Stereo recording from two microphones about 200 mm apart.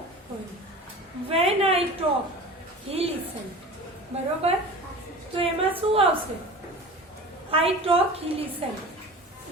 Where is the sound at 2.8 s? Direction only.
30° right (ahead or behind).